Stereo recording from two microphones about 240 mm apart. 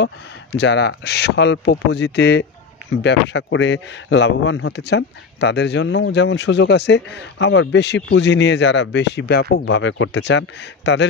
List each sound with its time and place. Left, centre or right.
0.0 s speech: left